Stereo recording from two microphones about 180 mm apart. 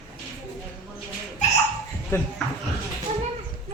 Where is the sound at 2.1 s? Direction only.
15° left (ahead or behind).